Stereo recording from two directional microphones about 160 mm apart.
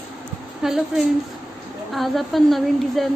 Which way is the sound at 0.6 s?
5° right (ahead or behind).